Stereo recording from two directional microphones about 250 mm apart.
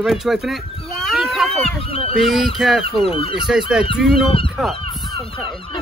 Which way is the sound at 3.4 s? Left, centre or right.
Centre.